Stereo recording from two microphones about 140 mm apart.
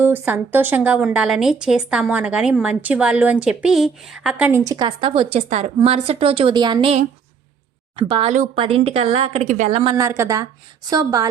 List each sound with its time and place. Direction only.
0.0 s a woman's voice: 15° right (ahead or behind)
4.4 s a woman's voice: 20° right (ahead or behind)
4.9 s speech: 40° right (ahead or behind)
7.9 s speech: 40° right (ahead or behind)
9.4 s a woman's voice: 60° right (ahead or behind)
9.7 s speech: 40° right (ahead or behind)
10.0 s a woman's voice: 20° right (ahead or behind)